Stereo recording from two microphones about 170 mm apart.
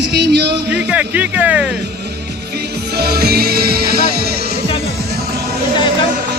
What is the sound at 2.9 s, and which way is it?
Music, 70° right (ahead or behind).